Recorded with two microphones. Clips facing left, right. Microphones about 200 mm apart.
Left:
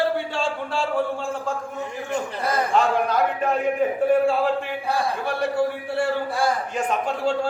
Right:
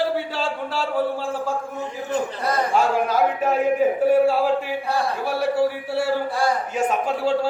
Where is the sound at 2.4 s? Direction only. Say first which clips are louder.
Left 1 dB; 5° right (ahead or behind).